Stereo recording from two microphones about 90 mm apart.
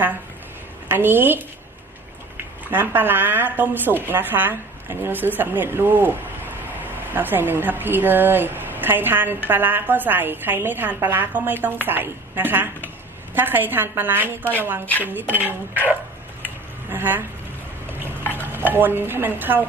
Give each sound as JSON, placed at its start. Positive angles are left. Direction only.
{"t": 0.9, "sound": "speech", "side_deg": -25}
{"t": 2.6, "sound": "speech", "side_deg": -20}
{"t": 18.2, "sound": "stir", "side_deg": 20}
{"t": 18.5, "sound": "speech", "side_deg": -20}